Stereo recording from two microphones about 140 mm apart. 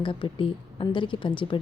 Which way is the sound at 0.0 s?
35° left (ahead or behind).